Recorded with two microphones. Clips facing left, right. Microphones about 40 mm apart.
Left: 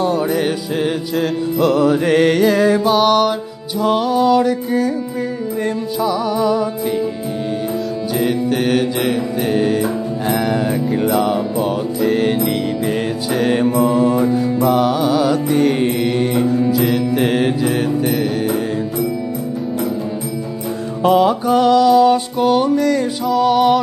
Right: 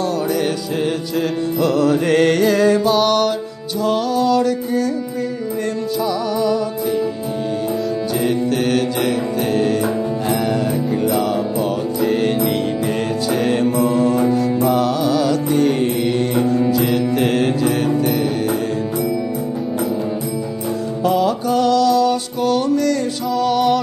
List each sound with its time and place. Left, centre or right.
1.8 s mantra: centre
6.0 s mantra: centre
8.2 s music: centre
12.0 s music: centre
13.3 s mantra: centre
14.6 s music: centre
14.9 s music: centre
15.8 s mantra: centre
21.1 s music: centre